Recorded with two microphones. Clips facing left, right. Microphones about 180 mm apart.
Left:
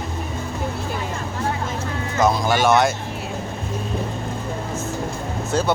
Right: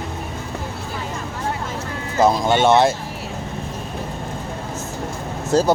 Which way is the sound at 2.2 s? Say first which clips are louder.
Right 3 dB; 25° right (ahead or behind).